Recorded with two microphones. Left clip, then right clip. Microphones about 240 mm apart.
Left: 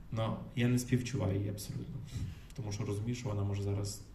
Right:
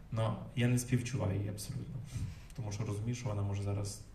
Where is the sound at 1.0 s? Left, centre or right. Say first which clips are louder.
Left 2 dB; right.